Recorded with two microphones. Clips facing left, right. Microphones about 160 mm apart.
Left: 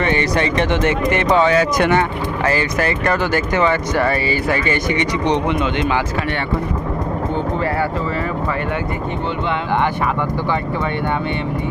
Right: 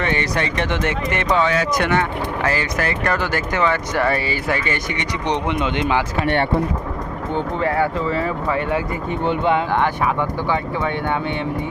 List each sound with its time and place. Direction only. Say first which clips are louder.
0.0 s speech: left 4 dB; 15° left (ahead or behind)
1.0 s speech: left 4 dB; 35° left (ahead or behind)
2.5 s speech: left 6 dB; 5° left (ahead or behind)